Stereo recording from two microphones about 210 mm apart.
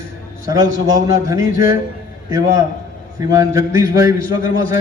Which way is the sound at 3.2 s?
15° right (ahead or behind).